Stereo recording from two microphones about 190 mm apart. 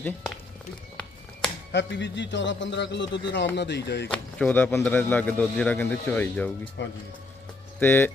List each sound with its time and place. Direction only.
0.0 s speech: 5° left (ahead or behind)
1.7 s a man's voice: 70° left (ahead or behind)
4.1 s a man's voice: 5° left (ahead or behind)
6.8 s a man's voice: 65° left (ahead or behind)
7.8 s a man's voice: 10° left (ahead or behind)